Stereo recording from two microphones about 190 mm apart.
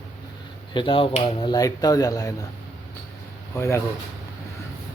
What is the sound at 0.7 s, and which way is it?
Speech, 25° left (ahead or behind).